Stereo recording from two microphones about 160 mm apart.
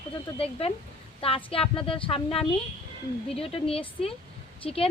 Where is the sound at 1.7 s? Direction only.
35° left (ahead or behind).